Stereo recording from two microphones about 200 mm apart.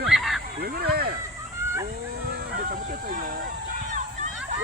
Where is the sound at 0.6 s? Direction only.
50° right (ahead or behind).